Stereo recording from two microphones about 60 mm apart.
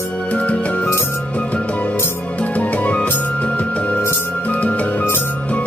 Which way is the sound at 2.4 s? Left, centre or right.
Left.